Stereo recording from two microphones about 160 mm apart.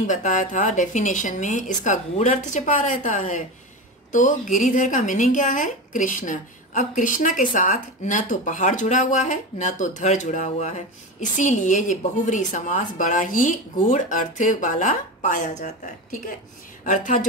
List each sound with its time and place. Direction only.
0.0 s a woman's voice: 50° left (ahead or behind)